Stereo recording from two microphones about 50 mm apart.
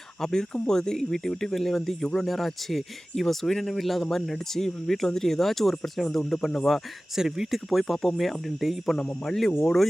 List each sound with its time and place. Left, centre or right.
0.2 s speech: centre
7.2 s speech: centre
9.2 s speech: centre